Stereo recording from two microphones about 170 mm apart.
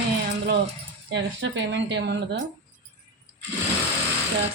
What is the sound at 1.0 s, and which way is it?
Speech, 90° right.